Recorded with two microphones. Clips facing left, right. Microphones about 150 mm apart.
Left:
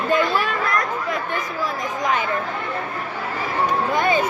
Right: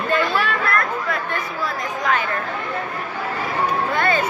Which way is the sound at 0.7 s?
20° left (ahead or behind).